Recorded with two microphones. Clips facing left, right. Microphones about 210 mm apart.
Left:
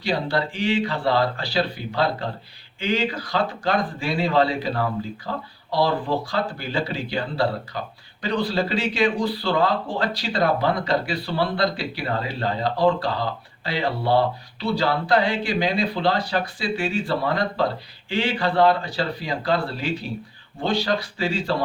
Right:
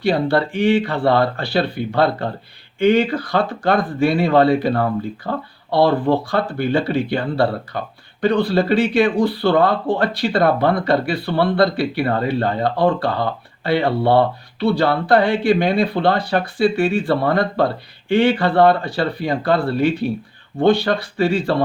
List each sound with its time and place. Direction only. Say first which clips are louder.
0.0 s speech: right 7 dB; 55° right (ahead or behind)